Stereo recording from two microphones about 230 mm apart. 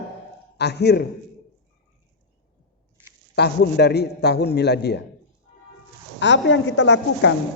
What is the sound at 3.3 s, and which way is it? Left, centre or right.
A man's voice, left.